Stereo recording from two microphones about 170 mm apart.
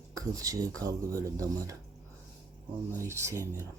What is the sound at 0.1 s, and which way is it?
Speech, 20° right (ahead or behind).